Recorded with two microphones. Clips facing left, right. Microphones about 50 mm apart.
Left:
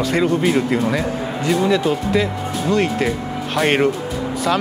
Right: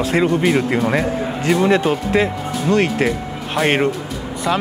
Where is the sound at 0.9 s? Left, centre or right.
Right.